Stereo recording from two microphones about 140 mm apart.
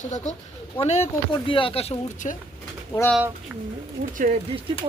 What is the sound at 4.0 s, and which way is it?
Speech, 70° right (ahead or behind).